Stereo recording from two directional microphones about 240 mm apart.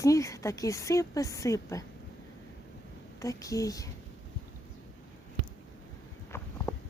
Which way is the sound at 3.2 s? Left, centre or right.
Centre.